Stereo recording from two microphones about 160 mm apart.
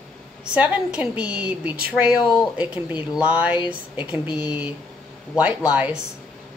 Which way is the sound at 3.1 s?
10° right (ahead or behind).